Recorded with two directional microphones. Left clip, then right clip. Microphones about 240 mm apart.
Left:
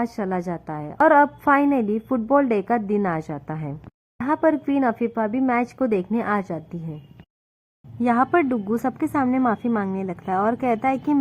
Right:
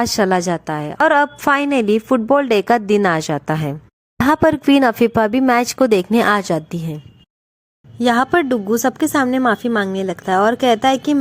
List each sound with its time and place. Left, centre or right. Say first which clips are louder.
0.0 s a woman's voice: right 10 dB; right
8.0 s a woman's voice: right 5 dB; right